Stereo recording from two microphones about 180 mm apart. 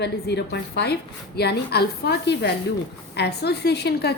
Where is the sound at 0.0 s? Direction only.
70° left (ahead or behind).